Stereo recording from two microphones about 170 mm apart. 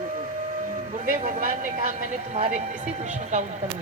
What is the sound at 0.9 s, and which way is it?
A woman's voice, 50° right (ahead or behind).